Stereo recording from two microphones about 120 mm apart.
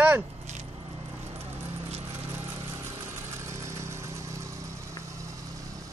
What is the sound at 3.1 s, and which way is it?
Vehicle, 25° right (ahead or behind).